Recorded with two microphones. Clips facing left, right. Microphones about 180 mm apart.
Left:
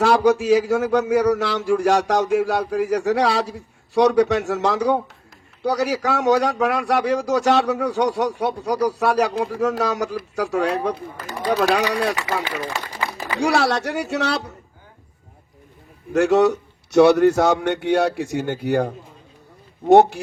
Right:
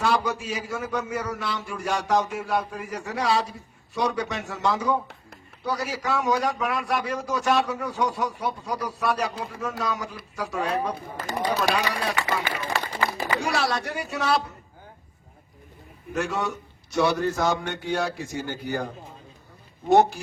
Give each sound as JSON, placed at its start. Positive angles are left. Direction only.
{"t": 0.0, "sound": "a man's voice", "side_deg": 75}
{"t": 13.4, "sound": "a man's voice", "side_deg": 75}
{"t": 16.1, "sound": "a man's voice", "side_deg": 80}